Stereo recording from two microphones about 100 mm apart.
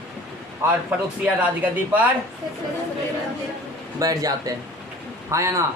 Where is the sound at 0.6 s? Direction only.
30° right (ahead or behind).